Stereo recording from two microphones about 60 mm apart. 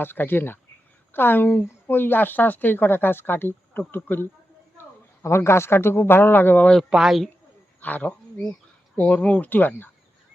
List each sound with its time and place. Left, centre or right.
0.0 s a woman's voice: left
4.8 s a man's voice: left
6.9 s a woman's voice: centre
7.8 s speech: left